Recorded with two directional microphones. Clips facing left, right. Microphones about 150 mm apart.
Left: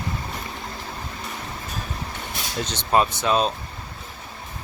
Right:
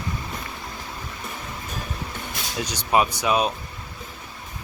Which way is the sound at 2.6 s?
10° right (ahead or behind).